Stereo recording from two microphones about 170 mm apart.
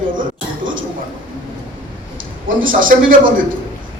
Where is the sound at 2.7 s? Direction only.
55° right (ahead or behind).